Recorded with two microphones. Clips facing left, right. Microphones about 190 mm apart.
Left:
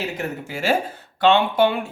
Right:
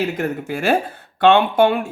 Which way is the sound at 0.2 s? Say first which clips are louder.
Right 5 dB; 55° right (ahead or behind).